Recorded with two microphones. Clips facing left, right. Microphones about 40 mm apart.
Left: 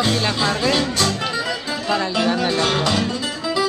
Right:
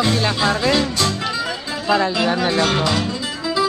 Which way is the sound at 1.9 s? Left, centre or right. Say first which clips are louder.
Right 3 dB; centre.